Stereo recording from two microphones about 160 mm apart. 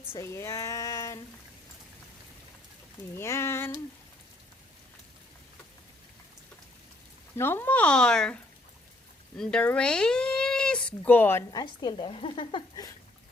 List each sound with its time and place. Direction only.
0.2 s speech: 15° left (ahead or behind)
3.2 s speech: 15° left (ahead or behind)
7.3 s speech: 15° left (ahead or behind)
9.4 s speech: 5° left (ahead or behind)
11.6 s speech: 30° left (ahead or behind)